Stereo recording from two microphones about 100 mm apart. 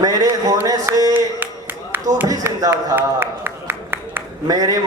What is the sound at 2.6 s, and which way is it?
Speech, 35° right (ahead or behind).